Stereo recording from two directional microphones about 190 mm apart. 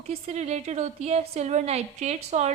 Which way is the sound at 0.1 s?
35° right (ahead or behind).